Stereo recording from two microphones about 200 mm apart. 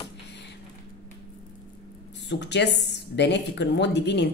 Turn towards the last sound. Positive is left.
turn(degrees=60)  # may be behind; listen again after turning